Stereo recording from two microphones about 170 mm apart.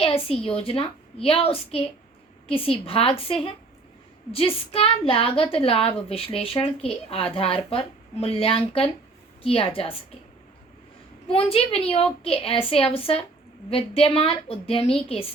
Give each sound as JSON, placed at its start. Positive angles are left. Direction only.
{"t": 0.0, "sound": "a woman's voice", "side_deg": 35}
{"t": 11.3, "sound": "a woman's voice", "side_deg": 35}